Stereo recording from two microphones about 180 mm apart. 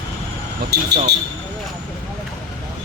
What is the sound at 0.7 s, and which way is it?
Speech, 65° right (ahead or behind).